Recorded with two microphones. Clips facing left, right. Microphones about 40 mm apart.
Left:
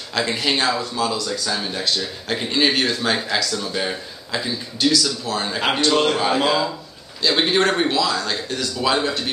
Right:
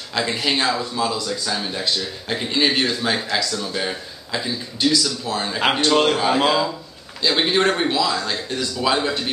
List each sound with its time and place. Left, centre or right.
0.1 s a man's voice: centre
5.9 s a man's voice: centre
6.1 s a man's voice: centre